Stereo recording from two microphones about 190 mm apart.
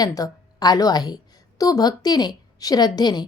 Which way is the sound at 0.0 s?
20° left (ahead or behind).